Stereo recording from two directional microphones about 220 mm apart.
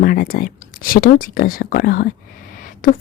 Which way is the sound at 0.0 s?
40° left (ahead or behind).